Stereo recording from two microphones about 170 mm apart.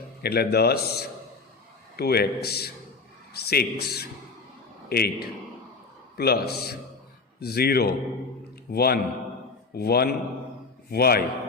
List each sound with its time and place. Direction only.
0.2 s a man's voice: 70° left (ahead or behind)
6.1 s a man's voice: 65° left (ahead or behind)